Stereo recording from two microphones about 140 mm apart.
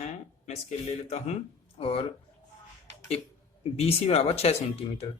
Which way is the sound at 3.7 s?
45° left (ahead or behind).